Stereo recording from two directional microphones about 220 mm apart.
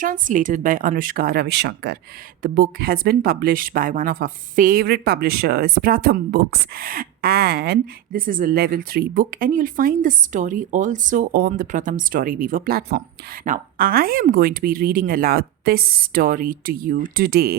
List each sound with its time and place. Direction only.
0.0 s speech: 35° right (ahead or behind)